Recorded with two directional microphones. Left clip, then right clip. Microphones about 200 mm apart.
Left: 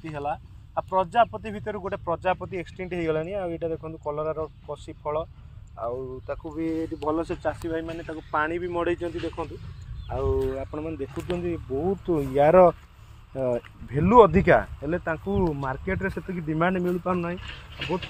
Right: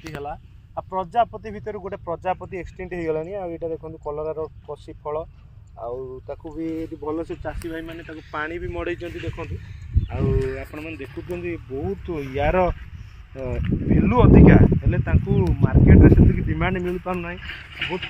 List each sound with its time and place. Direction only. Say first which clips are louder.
0.2 s speech: left 3 dB; 25° left (ahead or behind)
10.6 s speech: left 1 dB; 35° left (ahead or behind)
12.1 s speech: left 5 dB; 55° left (ahead or behind)
13.9 s speech: left 1 dB; 60° left (ahead or behind)